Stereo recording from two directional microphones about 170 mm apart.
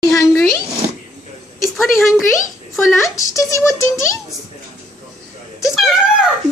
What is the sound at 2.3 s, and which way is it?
A child's voice, 20° left (ahead or behind).